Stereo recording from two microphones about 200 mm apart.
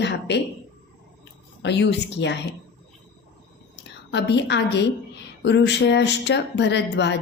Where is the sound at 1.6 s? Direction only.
60° left (ahead or behind).